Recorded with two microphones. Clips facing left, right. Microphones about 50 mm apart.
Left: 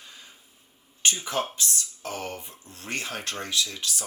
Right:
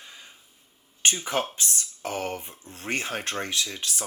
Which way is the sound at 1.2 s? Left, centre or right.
Right.